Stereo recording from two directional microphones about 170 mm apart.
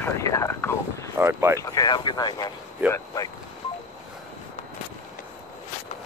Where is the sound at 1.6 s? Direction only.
20° left (ahead or behind).